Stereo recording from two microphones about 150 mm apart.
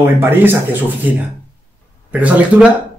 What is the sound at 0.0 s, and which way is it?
A man's voice, 15° right (ahead or behind).